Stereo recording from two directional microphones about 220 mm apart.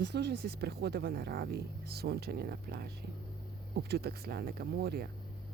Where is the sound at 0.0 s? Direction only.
50° right (ahead or behind).